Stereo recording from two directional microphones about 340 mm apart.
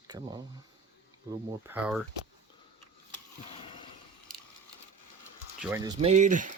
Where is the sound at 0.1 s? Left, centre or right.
Centre.